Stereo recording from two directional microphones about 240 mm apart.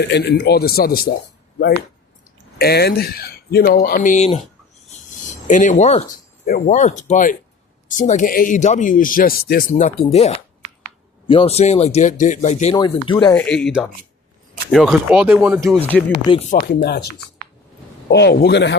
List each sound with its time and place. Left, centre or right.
0.0 s a man's voice: left
2.6 s speech: left
4.9 s cricket: left
6.4 s speech: left
12.7 s speech: centre
13.3 s speech: centre
15.8 s speech: centre
16.5 s a man's voice: left